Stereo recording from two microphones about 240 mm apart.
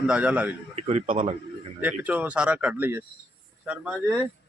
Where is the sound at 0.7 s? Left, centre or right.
Right.